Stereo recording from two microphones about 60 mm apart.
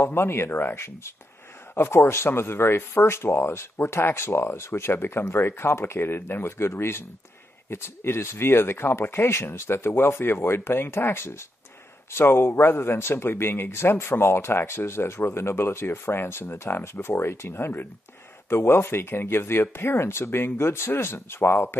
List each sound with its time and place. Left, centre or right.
0.0 s speech: left